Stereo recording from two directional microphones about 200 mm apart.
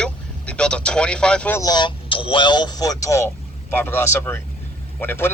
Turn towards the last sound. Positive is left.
turn(degrees=10)  # may be behind; listen again after turning